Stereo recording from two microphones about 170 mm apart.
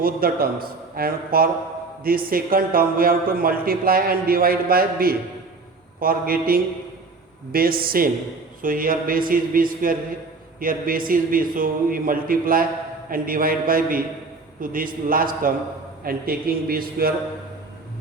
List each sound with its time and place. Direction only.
0.0 s a man's voice: 60° right (ahead or behind)